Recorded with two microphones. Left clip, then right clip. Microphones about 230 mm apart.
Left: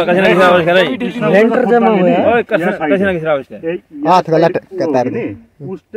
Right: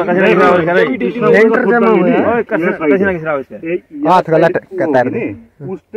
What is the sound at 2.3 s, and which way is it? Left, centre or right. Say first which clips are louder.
A man's voice: left 2 dB; left.